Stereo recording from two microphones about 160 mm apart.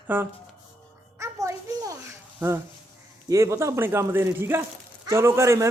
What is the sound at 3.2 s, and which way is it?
Speech, 20° right (ahead or behind).